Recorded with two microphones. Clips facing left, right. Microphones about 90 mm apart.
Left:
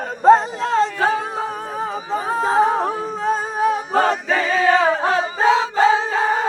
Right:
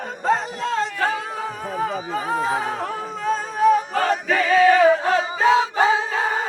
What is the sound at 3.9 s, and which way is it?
Choir, 30° left (ahead or behind).